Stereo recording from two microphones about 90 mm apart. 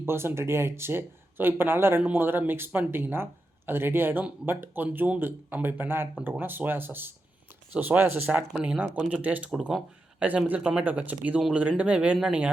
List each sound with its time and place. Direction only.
0.0 s speech: 25° right (ahead or behind)
9.5 s speech: 5° right (ahead or behind)
10.2 s speech: 15° right (ahead or behind)